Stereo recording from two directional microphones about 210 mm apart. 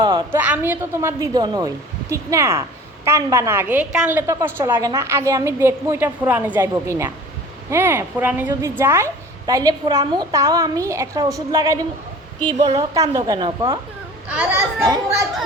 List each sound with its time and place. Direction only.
0.0 s a sound: 20° right (ahead or behind)
0.3 s a woman's voice: 10° right (ahead or behind)
12.5 s a woman's voice: 30° right (ahead or behind)
12.7 s a woman's voice: 15° right (ahead or behind)
14.3 s a woman's voice: 5° right (ahead or behind)
14.8 s a child's voice: 20° right (ahead or behind)